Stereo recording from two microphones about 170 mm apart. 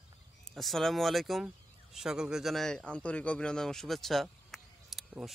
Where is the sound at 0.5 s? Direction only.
Centre (ahead or behind).